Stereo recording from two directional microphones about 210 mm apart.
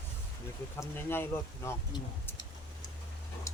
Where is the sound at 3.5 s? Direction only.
15° left (ahead or behind).